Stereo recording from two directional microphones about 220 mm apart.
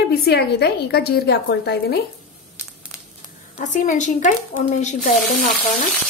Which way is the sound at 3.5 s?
35° left (ahead or behind).